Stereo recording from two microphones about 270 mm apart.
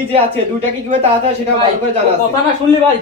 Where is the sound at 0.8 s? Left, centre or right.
Right.